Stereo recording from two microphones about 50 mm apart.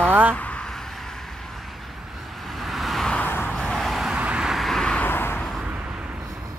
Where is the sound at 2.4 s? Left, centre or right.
Centre.